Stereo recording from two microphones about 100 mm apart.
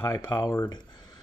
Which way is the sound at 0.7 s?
40° left (ahead or behind).